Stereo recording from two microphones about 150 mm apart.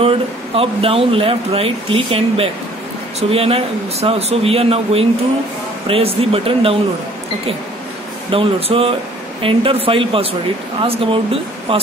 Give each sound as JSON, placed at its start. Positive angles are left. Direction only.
{"t": 0.6, "sound": "speech", "side_deg": -40}
{"t": 8.3, "sound": "speech", "side_deg": -40}